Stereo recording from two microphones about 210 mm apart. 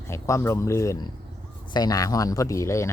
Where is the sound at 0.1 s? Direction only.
15° left (ahead or behind).